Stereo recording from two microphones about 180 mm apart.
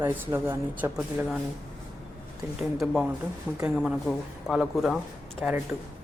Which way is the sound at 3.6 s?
5° right (ahead or behind).